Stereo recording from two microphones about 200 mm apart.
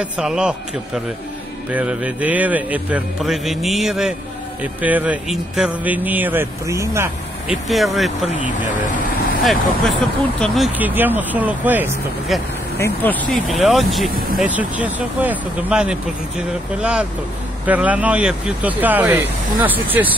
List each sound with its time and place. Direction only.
0.0 s speech: 5° right (ahead or behind)
7.4 s speech: centre (ahead or behind)
8.4 s speech: 40° left (ahead or behind)
9.4 s speech: centre (ahead or behind)
12.7 s speech: 10° left (ahead or behind); by 20.1 s 10° right (ahead or behind)